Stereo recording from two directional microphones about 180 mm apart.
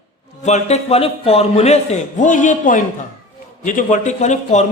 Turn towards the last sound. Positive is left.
turn(degrees=40)  # may be behind; listen again after turning